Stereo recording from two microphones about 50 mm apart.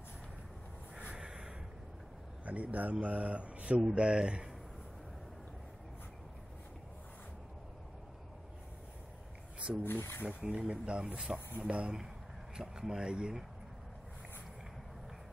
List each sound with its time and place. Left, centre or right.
1.1 s a sound: centre
2.4 s a man's voice: right
9.6 s a man's voice: right